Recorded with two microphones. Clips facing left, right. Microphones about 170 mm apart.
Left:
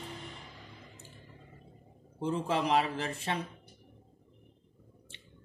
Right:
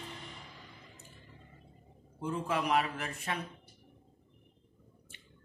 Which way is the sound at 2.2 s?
30° left (ahead or behind).